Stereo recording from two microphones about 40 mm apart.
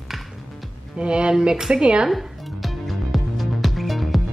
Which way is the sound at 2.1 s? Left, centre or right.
Centre.